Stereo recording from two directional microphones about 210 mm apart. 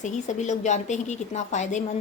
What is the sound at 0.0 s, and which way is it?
A woman's voice, 35° left (ahead or behind).